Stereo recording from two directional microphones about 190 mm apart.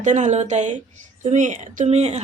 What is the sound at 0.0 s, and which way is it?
A woman's voice, 40° right (ahead or behind).